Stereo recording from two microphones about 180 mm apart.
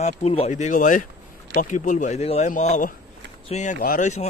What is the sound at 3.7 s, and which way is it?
Speech, 50° left (ahead or behind).